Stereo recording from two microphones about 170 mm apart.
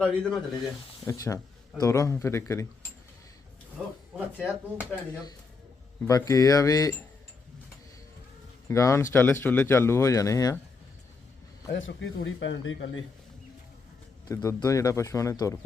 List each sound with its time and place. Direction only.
0.0 s speech: 5° left (ahead or behind)
1.0 s speech: 20° left (ahead or behind)
3.8 s a sound: 5° right (ahead or behind)
4.4 s speech: 5° right (ahead or behind)
6.1 s speech: 20° left (ahead or behind)
8.6 s speech: 20° left (ahead or behind)
11.9 s speech: 90° left
14.3 s speech: 20° left (ahead or behind)